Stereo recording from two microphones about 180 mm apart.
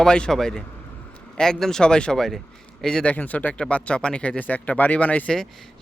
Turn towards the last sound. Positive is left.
turn(degrees=5)  # may be behind; listen again after turning